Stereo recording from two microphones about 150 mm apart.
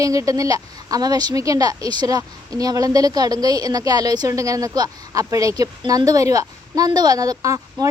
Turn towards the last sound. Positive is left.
turn(degrees=-25)  # may be behind; listen again after turning